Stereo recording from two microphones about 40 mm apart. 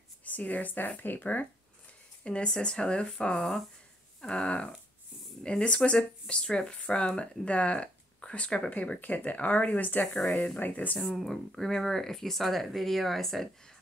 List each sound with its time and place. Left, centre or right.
0.2 s speech: left
2.2 s speech: left
11.0 s speech: centre